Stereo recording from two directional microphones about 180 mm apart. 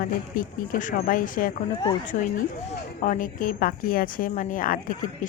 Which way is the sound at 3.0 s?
50° left (ahead or behind).